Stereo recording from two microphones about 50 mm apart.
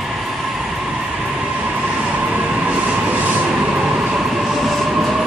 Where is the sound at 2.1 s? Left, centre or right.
Right.